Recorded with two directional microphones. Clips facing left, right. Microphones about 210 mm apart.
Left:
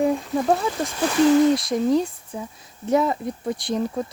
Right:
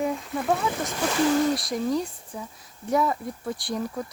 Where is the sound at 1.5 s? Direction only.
25° left (ahead or behind).